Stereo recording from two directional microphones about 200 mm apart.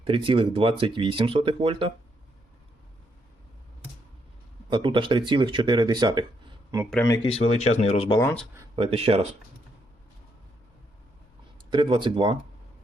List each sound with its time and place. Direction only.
0.0 s speech: 25° right (ahead or behind)
4.7 s speech: 25° right (ahead or behind)
7.0 s speech: 15° left (ahead or behind)
7.3 s speech: 30° left (ahead or behind)
8.2 s speech: 10° left (ahead or behind)
8.7 s speech: 25° right (ahead or behind)
11.7 s speech: 25° right (ahead or behind)